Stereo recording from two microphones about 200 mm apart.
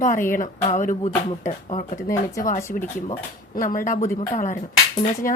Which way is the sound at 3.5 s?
45° left (ahead or behind).